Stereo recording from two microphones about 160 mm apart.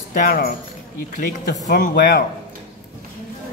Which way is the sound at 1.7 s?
70° left (ahead or behind).